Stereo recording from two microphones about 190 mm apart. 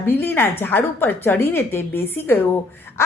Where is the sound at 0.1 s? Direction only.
10° left (ahead or behind).